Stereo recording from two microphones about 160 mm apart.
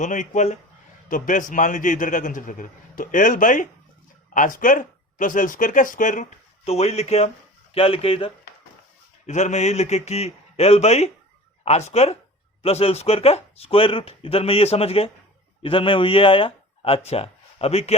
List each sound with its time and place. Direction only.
0.0 s a man's voice: 50° left (ahead or behind)
9.2 s speech: 45° left (ahead or behind)